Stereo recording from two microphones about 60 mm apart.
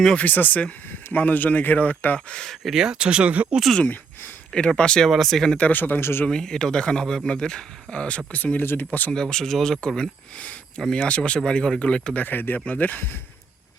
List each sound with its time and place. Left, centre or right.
0.2 s speech: left
2.1 s speech: centre
2.7 s speech: centre
4.8 s speech: centre
5.0 s speech: centre
5.5 s speech: left
6.0 s speech: left
6.2 s speech: centre; by 9.1 s left
9.1 s speech: centre
12.2 s speech: left